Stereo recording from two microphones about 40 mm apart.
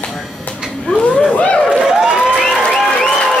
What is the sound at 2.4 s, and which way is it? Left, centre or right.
Applause, centre.